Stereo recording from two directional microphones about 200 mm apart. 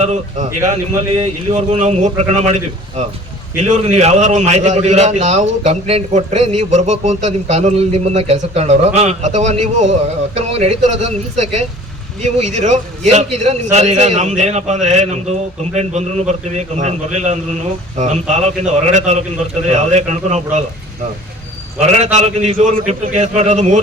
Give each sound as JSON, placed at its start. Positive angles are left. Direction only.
{"t": 0.0, "sound": "a man's voice", "side_deg": -35}
{"t": 3.6, "sound": "a man's voice", "side_deg": -35}
{"t": 21.8, "sound": "a man's voice", "side_deg": -35}